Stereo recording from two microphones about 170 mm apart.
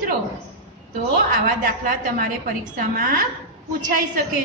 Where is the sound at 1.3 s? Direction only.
55° right (ahead or behind).